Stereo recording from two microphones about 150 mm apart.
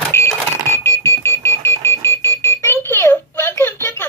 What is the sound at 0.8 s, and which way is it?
Alarm clock, 15° left (ahead or behind).